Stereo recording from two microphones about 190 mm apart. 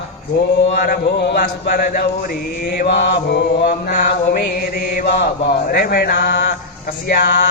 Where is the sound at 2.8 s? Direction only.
60° left (ahead or behind).